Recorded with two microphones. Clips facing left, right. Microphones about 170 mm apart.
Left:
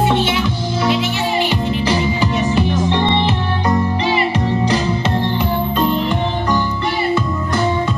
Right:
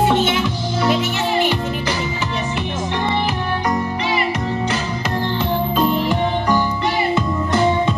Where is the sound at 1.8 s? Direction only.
35° left (ahead or behind).